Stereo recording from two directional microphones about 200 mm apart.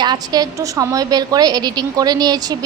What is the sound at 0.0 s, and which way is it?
A woman's voice, 20° right (ahead or behind).